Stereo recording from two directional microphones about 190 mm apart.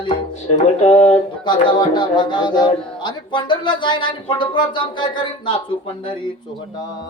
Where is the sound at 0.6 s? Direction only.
35° left (ahead or behind).